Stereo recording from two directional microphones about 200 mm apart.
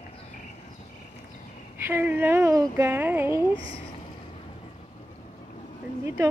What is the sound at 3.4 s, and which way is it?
Speech, 25° left (ahead or behind).